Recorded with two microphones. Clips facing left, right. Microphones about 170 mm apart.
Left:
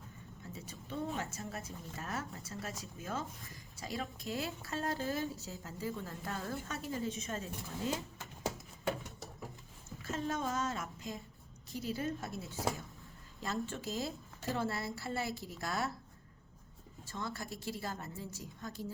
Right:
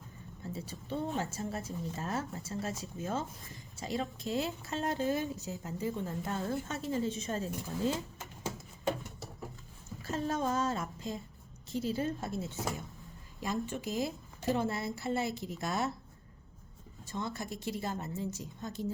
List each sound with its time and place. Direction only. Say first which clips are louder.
0.5 s speech: right 5 dB; 30° right (ahead or behind)
10.0 s a woman's voice: right 4 dB; 35° right (ahead or behind)
13.4 s speech: right 3 dB; 15° right (ahead or behind)
17.1 s speech: right 4 dB; 20° right (ahead or behind)